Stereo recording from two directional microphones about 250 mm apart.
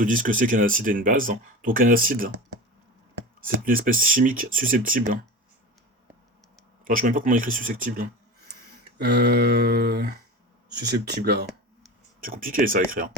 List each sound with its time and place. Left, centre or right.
0.0 s speech: right
3.4 s speech: right
6.8 s speech: right